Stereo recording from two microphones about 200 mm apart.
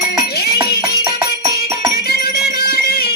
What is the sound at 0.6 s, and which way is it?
Music, 50° left (ahead or behind).